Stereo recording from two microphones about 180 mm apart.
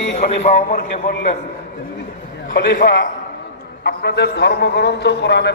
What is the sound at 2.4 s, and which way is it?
Speech, 60° left (ahead or behind).